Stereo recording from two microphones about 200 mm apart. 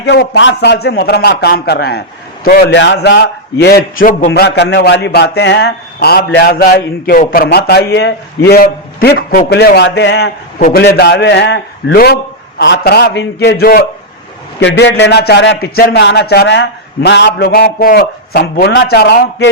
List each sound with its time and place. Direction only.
0.0 s speech: 55° left (ahead or behind)
4.3 s a man's voice: 60° left (ahead or behind)
14.6 s speech: 65° left (ahead or behind)